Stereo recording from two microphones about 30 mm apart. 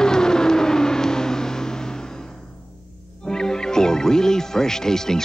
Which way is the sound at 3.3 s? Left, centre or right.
Left.